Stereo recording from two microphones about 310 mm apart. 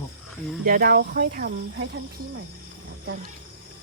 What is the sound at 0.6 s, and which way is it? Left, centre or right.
Speech, right.